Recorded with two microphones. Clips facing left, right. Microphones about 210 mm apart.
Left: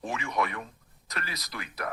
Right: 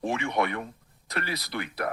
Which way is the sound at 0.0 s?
30° right (ahead or behind).